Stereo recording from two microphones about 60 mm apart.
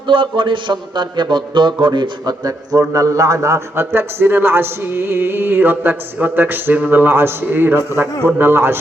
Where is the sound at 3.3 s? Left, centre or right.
Right.